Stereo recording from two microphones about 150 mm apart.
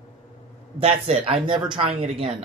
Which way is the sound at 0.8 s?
40° right (ahead or behind).